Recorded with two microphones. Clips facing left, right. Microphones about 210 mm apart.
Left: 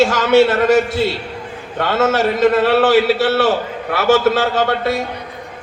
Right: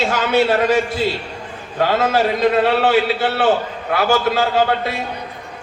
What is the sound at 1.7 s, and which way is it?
A man's voice, 70° left (ahead or behind).